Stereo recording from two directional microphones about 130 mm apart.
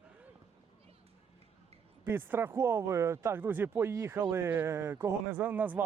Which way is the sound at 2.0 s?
15° right (ahead or behind).